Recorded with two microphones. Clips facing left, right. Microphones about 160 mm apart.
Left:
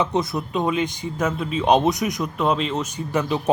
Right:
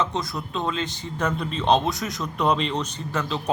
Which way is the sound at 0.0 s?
20° left (ahead or behind).